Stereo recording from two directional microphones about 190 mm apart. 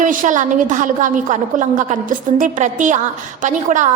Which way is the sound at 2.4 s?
40° right (ahead or behind).